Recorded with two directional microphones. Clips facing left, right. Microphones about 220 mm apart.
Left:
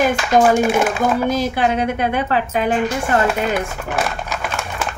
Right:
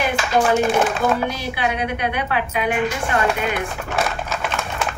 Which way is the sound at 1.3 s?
45° left (ahead or behind).